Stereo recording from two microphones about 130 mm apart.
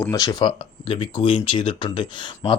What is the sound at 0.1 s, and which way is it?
Speech, 30° left (ahead or behind).